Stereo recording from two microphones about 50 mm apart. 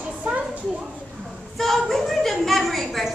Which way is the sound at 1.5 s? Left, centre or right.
Centre.